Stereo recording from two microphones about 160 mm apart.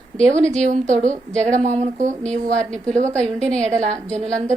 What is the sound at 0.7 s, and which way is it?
A woman's voice, 50° right (ahead or behind).